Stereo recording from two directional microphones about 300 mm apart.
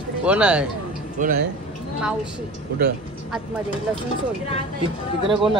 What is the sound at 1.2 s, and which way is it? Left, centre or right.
Speech, right.